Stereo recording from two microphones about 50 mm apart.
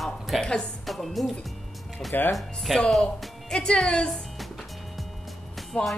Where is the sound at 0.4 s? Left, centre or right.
Centre.